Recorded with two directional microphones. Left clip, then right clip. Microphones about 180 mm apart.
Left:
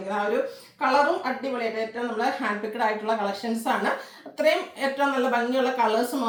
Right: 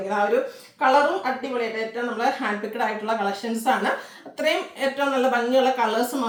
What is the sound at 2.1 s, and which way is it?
A woman's voice, 15° right (ahead or behind).